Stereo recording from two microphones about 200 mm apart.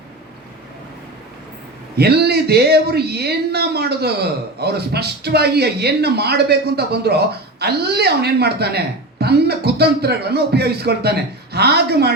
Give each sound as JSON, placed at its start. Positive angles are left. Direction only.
{"t": 2.0, "sound": "speech", "side_deg": -55}